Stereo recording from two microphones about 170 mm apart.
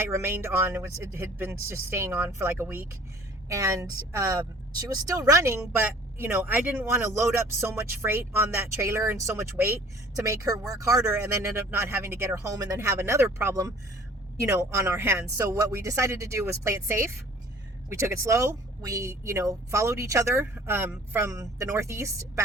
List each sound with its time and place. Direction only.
0.0 s a woman's voice: 15° right (ahead or behind)